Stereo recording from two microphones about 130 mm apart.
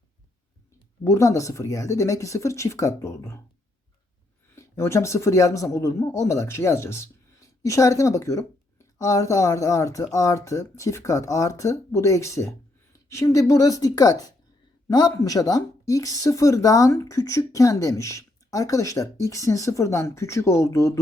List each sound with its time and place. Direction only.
1.0 s speech: 25° left (ahead or behind)
4.5 s speech: 20° left (ahead or behind)